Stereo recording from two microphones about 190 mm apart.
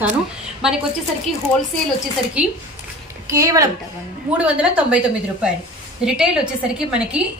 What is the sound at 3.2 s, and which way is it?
Speech, 15° right (ahead or behind).